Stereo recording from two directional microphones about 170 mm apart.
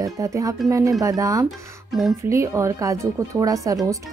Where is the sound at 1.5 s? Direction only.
Centre (ahead or behind).